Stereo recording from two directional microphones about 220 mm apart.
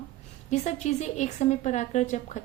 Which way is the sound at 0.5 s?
30° left (ahead or behind).